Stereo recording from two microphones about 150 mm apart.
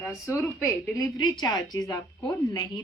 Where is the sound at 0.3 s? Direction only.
20° left (ahead or behind).